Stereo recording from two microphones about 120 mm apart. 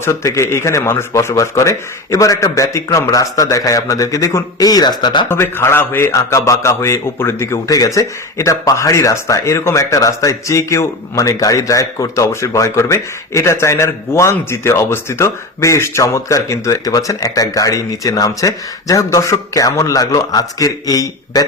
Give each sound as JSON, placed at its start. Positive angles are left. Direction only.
{"t": 0.0, "sound": "a man's voice", "side_deg": 25}
{"t": 5.3, "sound": "a man's voice", "side_deg": 20}